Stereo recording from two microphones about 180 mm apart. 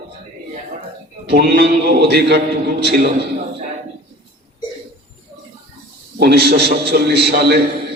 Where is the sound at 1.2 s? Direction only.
65° right (ahead or behind).